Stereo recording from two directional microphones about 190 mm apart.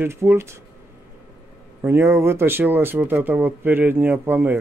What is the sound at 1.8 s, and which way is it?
Speech, 15° right (ahead or behind).